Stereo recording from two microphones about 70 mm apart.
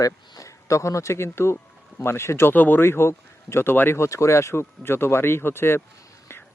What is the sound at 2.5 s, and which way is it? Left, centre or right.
A man's voice, left.